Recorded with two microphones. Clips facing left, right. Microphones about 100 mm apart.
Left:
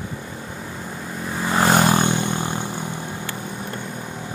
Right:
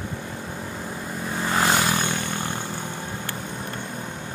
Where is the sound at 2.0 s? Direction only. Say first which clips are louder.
Left 5 dB; 20° left (ahead or behind).